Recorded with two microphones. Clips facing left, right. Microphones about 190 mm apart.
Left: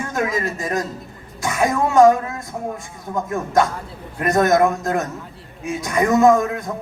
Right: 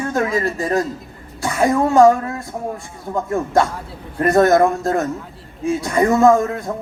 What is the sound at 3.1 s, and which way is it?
A man's voice, 30° right (ahead or behind).